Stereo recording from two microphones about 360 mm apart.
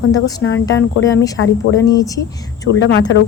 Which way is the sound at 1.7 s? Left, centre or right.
Centre.